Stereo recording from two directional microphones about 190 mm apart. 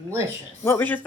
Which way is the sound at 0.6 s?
10° left (ahead or behind).